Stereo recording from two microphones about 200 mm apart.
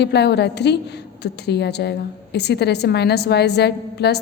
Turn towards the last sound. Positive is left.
turn(degrees=55)  # may be behind; listen again after turning